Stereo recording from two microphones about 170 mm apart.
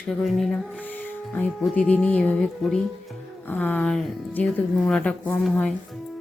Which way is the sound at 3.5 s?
10° left (ahead or behind).